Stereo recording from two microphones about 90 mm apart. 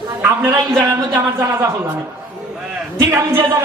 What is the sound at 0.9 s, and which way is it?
Speech, 40° right (ahead or behind).